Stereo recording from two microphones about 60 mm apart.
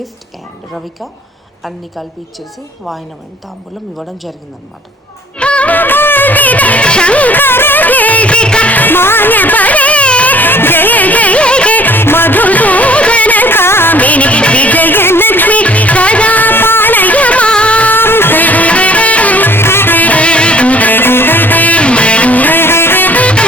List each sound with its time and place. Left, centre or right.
3.9 s a woman's voice: centre
5.4 s music: centre; by 13.9 s left
13.9 s music: left
17.9 s music: left; by 23.5 s centre